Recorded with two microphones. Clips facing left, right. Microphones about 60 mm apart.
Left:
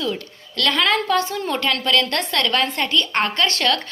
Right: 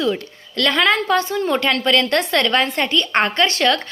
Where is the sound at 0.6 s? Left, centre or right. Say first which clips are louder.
Right 2 dB; centre.